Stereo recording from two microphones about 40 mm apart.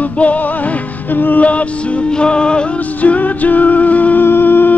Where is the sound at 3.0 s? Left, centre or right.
Left.